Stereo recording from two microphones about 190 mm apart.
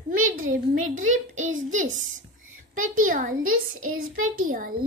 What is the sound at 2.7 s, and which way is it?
Child singing, 45° right (ahead or behind).